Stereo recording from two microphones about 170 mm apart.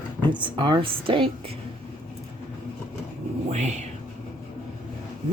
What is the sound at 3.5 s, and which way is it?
Speech, 40° right (ahead or behind).